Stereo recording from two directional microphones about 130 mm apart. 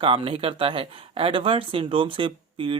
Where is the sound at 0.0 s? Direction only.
45° right (ahead or behind).